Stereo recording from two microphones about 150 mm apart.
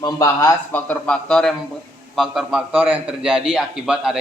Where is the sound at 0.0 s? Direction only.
25° left (ahead or behind).